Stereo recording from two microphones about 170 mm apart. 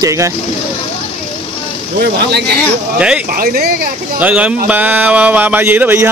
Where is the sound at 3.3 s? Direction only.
60° right (ahead or behind).